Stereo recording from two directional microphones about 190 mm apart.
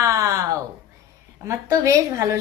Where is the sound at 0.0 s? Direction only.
15° right (ahead or behind).